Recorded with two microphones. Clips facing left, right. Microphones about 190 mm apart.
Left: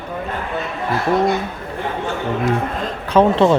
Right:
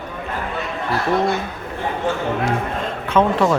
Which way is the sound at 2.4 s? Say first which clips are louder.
Left 2 dB; 35° left (ahead or behind).